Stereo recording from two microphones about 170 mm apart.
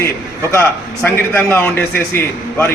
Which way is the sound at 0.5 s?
10° left (ahead or behind).